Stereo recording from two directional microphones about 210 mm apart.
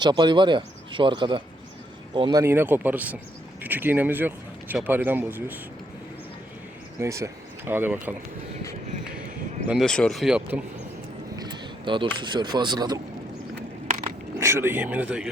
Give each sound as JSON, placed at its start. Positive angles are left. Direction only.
{"t": 0.0, "sound": "speech", "side_deg": -20}
{"t": 7.0, "sound": "speech", "side_deg": -15}
{"t": 9.6, "sound": "speech", "side_deg": 0}
{"t": 11.3, "sound": "speech", "side_deg": -20}
{"t": 13.6, "sound": "a sound", "side_deg": -40}
{"t": 14.3, "sound": "speech", "side_deg": -15}